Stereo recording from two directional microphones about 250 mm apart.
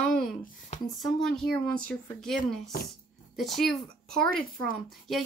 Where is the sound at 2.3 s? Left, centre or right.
Left.